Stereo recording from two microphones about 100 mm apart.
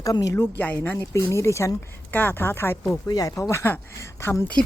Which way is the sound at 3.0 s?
40° left (ahead or behind).